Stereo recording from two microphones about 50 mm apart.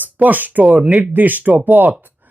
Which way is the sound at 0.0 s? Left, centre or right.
Right.